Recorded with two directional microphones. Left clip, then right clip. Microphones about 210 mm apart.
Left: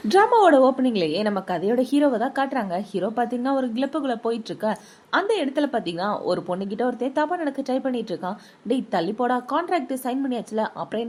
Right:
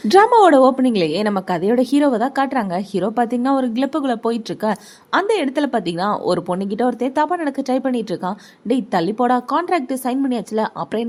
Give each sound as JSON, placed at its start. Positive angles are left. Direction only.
{"t": 0.0, "sound": "a woman's voice", "side_deg": -35}